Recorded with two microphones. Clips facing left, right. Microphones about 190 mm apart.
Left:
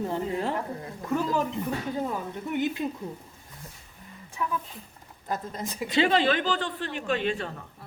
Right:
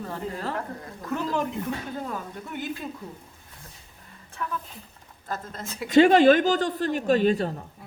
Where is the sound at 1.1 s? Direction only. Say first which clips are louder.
Left 1 dB; 5° left (ahead or behind).